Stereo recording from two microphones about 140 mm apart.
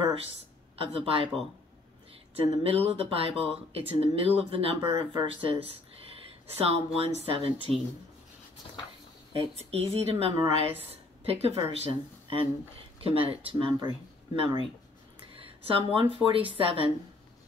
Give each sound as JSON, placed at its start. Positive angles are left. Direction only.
{"t": 0.0, "sound": "a sound", "side_deg": -40}
{"t": 0.7, "sound": "speech", "side_deg": -40}
{"t": 2.6, "sound": "speech", "side_deg": -45}
{"t": 9.3, "sound": "a woman's voice", "side_deg": -45}